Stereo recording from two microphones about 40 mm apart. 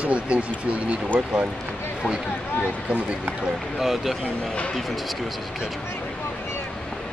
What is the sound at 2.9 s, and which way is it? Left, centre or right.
Speech, right.